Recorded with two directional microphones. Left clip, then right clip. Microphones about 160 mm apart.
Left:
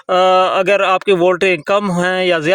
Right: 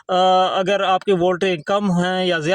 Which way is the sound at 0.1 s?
25° left (ahead or behind).